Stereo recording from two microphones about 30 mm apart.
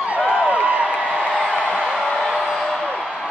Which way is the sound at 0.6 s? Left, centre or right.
Right.